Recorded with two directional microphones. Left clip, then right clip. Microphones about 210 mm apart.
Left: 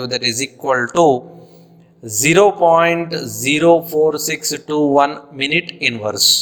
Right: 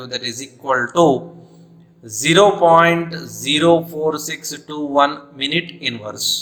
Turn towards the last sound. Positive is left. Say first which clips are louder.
# left 7 dB
turn(degrees=30)  # may be behind; listen again after turning